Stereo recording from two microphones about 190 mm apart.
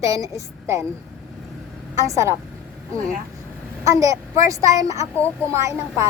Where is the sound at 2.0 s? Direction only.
15° right (ahead or behind).